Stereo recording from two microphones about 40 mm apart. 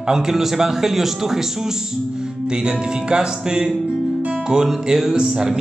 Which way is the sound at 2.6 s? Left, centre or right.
Right.